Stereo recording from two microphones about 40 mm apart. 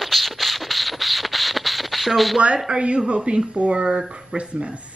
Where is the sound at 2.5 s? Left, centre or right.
Centre.